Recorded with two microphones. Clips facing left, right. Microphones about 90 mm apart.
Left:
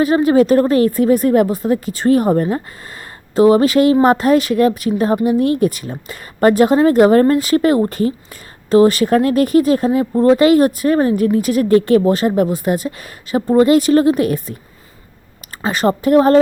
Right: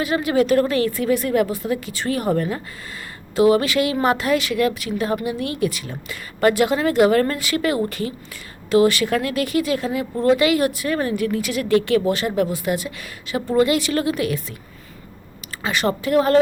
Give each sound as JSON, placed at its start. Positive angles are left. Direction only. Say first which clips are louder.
{"t": 0.0, "sound": "speech", "louder": "left 7 dB", "side_deg": 40}
{"t": 15.6, "sound": "speech", "louder": "left 6 dB", "side_deg": 40}